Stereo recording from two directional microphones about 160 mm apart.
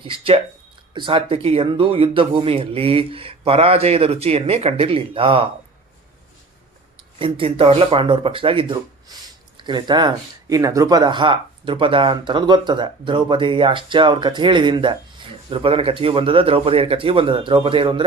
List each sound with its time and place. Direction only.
0.0 s speech: 35° right (ahead or behind)
7.2 s speech: 35° right (ahead or behind)